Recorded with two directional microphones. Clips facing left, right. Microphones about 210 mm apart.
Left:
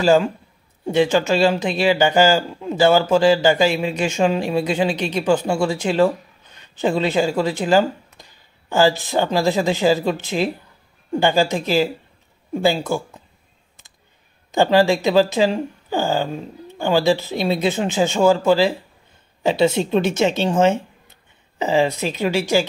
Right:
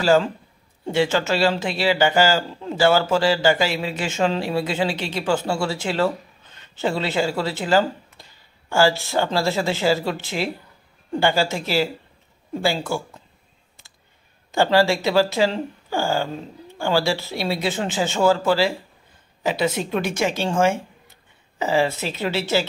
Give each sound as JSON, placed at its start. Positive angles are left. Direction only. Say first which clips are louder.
{"t": 0.0, "sound": "a man's voice", "louder": "left 2 dB", "side_deg": 15}
{"t": 14.5, "sound": "a man's voice", "louder": "left 3 dB", "side_deg": 15}